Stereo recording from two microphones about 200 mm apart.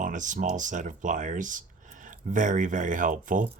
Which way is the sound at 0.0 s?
40° right (ahead or behind).